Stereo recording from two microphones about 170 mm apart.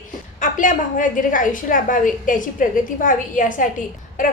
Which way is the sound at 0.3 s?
50° left (ahead or behind).